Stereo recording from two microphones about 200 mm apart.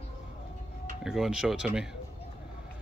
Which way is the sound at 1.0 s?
5° right (ahead or behind).